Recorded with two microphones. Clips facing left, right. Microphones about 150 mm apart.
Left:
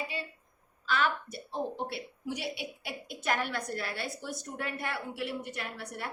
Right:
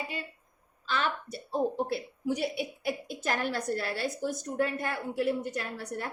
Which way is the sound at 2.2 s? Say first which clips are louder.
Right 6 dB; 45° right (ahead or behind).